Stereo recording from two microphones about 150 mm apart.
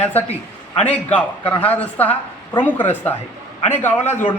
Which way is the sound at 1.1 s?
10° left (ahead or behind).